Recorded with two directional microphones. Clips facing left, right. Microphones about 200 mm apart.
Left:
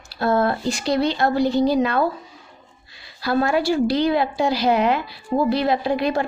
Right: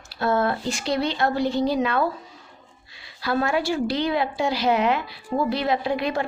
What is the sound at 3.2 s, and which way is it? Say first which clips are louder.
A woman's voice: left 4 dB; 35° left (ahead or behind).